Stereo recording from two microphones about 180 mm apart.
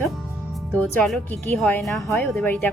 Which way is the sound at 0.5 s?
10° left (ahead or behind).